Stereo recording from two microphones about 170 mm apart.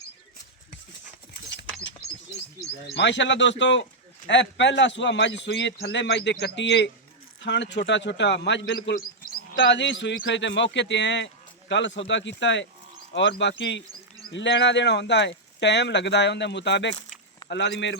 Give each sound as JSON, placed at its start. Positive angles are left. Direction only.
{"t": 2.9, "sound": "a man's voice", "side_deg": 90}